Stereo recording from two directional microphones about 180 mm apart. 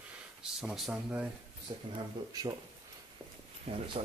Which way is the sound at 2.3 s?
20° right (ahead or behind).